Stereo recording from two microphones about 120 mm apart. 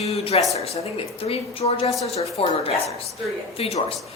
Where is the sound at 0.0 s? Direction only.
60° left (ahead or behind).